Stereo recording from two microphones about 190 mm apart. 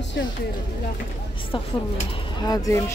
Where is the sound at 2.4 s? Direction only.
20° left (ahead or behind).